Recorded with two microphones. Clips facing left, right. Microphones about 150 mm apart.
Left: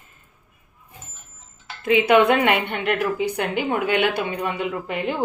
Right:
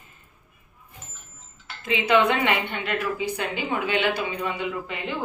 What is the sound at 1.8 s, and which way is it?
A woman's voice, 55° left (ahead or behind).